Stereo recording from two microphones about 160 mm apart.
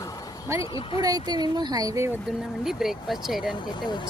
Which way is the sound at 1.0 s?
25° right (ahead or behind).